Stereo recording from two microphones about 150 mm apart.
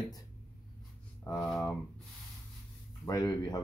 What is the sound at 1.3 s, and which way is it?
Speech, 20° left (ahead or behind).